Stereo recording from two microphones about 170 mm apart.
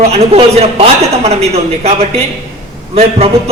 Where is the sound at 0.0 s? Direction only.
35° right (ahead or behind).